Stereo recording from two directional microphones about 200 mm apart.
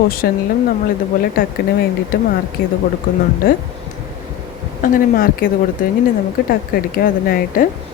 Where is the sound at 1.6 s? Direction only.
50° left (ahead or behind).